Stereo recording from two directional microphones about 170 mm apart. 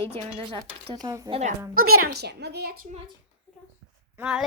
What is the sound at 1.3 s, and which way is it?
Cutlery, 40° right (ahead or behind).